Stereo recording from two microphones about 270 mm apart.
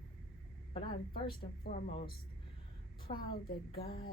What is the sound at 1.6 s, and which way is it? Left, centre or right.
Speech, left.